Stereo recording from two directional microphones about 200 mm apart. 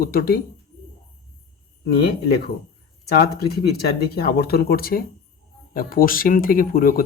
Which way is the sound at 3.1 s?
50° left (ahead or behind).